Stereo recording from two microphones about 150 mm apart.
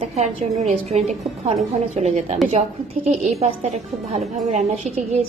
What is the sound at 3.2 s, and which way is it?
A woman's voice, 45° right (ahead or behind).